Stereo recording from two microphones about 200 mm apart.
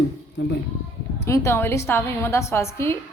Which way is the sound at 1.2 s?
15° left (ahead or behind).